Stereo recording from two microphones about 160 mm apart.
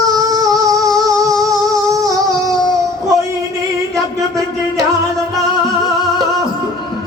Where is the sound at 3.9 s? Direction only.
20° right (ahead or behind).